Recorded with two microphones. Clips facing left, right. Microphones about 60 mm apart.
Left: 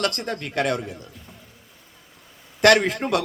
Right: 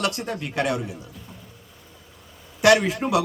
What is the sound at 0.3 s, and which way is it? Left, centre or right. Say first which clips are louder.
Speech: left 1 dB; left.